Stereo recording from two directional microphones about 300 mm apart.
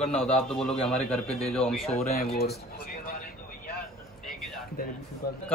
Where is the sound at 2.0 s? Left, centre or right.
Left.